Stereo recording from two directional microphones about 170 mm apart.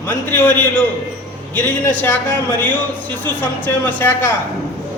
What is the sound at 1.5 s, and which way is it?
A man's voice, 10° left (ahead or behind).